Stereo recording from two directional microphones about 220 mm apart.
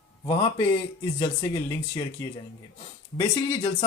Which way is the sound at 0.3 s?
15° left (ahead or behind).